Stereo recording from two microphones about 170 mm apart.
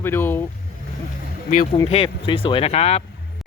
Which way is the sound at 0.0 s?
15° left (ahead or behind).